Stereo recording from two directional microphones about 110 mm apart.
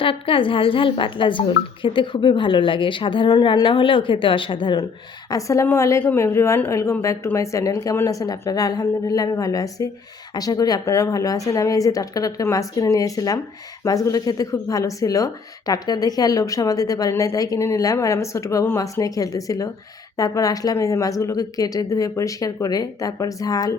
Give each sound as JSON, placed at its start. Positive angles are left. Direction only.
{"t": 0.0, "sound": "a woman's voice", "side_deg": 55}
{"t": 5.3, "sound": "speech", "side_deg": 30}